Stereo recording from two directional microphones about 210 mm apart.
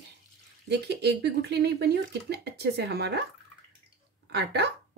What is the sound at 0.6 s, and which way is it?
Speech, 50° right (ahead or behind).